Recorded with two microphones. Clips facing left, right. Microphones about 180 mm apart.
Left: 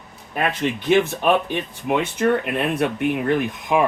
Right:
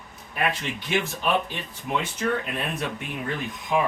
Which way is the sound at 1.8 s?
65° left (ahead or behind).